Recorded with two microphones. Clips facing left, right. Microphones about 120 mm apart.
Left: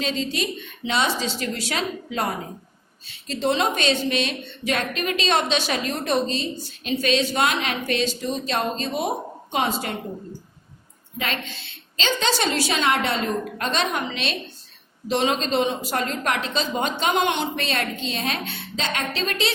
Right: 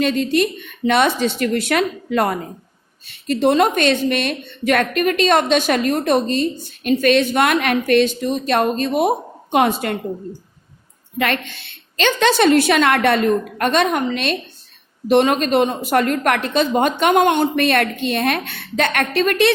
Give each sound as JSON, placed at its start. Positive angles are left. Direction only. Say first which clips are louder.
{"t": 0.0, "sound": "a woman's voice", "louder": "right 9 dB", "side_deg": -55}
{"t": 11.2, "sound": "a woman's voice", "louder": "right 8 dB", "side_deg": -60}